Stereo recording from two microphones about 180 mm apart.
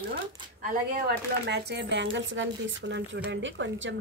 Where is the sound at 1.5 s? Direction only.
65° right (ahead or behind).